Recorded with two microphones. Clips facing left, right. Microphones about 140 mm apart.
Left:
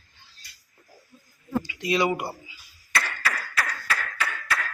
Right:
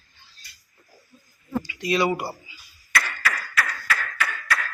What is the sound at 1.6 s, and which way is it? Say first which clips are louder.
Speech: right 1 dB; 25° left (ahead or behind).